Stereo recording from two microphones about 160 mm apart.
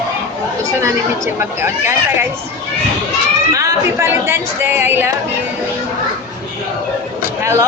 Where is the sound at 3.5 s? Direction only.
20° right (ahead or behind).